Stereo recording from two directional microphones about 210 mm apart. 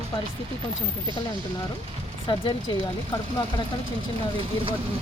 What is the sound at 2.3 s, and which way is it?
Speech, 20° left (ahead or behind).